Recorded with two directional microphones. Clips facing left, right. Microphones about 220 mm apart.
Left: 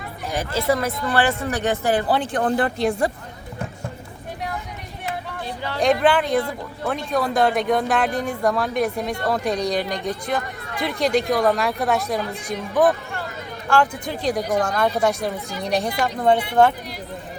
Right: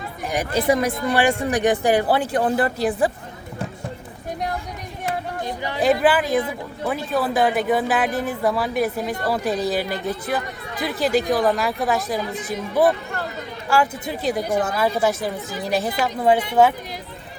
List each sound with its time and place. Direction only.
0.3 s speech: 15° right (ahead or behind)
5.5 s a sound: 15° right (ahead or behind)
5.8 s speech: 5° right (ahead or behind)